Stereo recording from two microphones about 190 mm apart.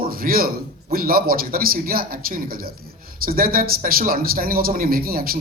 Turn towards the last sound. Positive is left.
turn(degrees=-50)  # may be behind; listen again after turning